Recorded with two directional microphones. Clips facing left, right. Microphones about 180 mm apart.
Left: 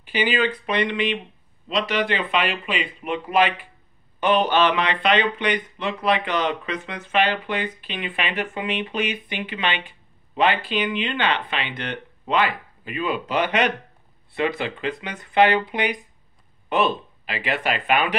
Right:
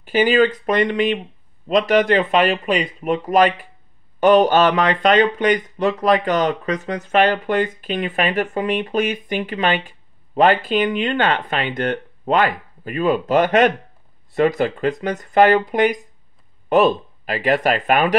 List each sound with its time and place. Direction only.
0.0 s speech: 45° right (ahead or behind)